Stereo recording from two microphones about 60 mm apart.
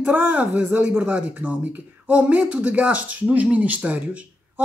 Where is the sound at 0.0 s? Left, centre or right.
Right.